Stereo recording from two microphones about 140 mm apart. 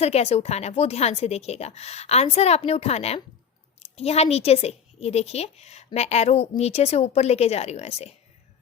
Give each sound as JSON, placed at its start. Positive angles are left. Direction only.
{"t": 0.0, "sound": "a woman's voice", "side_deg": 50}